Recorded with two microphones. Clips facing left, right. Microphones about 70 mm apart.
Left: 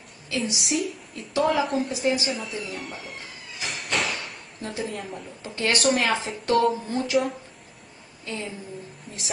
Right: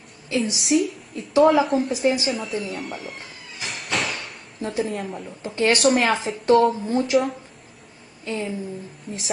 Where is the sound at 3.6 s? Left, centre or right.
Centre.